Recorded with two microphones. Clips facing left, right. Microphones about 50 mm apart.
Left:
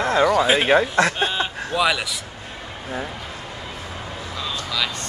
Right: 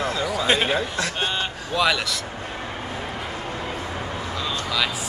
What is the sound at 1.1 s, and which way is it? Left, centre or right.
A man's voice, centre.